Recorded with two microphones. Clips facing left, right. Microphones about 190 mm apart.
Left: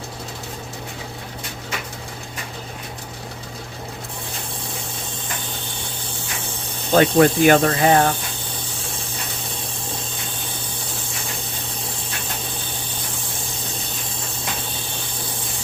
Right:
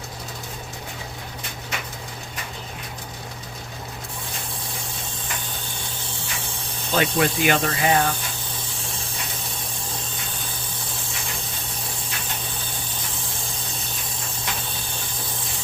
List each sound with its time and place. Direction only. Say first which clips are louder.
6.9 s speech: left 7 dB; 45° left (ahead or behind)